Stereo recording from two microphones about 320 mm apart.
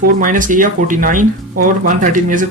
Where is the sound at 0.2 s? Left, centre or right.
Right.